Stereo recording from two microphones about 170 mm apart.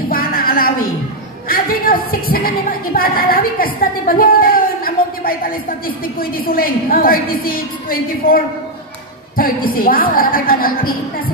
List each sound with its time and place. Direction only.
0.1 s music: 60° left (ahead or behind)
1.5 s a woman's voice: 60° left (ahead or behind)
9.4 s a woman's voice: 60° left (ahead or behind)